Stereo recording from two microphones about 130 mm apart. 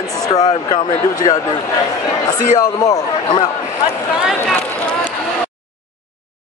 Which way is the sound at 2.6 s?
30° left (ahead or behind).